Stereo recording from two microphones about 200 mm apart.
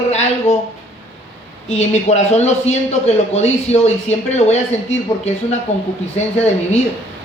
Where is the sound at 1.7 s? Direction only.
35° left (ahead or behind).